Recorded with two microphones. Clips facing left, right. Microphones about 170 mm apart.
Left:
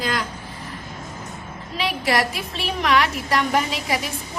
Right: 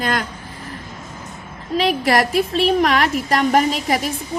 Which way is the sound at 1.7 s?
50° right (ahead or behind).